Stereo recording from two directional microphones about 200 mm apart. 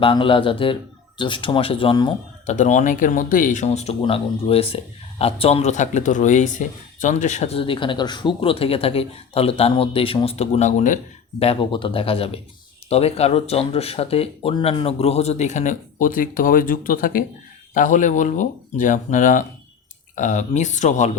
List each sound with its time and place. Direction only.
0.0 s speech: 25° left (ahead or behind)
2.5 s speech: 35° left (ahead or behind)